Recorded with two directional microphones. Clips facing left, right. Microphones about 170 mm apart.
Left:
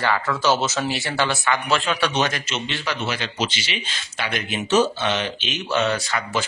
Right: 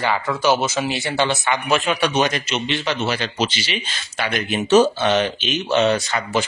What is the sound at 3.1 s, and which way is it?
Speech, 35° right (ahead or behind).